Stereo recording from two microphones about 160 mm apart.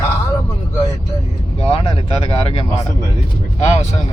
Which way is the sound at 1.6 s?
35° left (ahead or behind).